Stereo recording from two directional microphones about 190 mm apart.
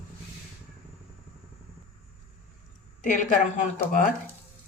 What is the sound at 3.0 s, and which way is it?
Speech, 40° left (ahead or behind).